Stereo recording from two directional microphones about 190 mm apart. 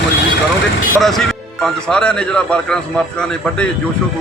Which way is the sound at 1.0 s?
Centre (ahead or behind).